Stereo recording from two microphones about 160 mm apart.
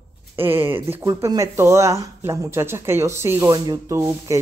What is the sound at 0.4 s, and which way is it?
Speech, 15° right (ahead or behind).